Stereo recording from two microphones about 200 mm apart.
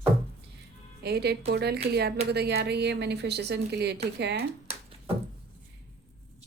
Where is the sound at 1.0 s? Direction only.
55° right (ahead or behind).